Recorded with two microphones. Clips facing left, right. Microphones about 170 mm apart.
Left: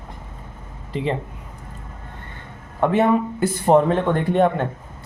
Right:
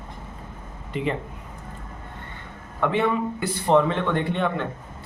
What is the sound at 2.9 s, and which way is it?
A man's voice, 45° left (ahead or behind).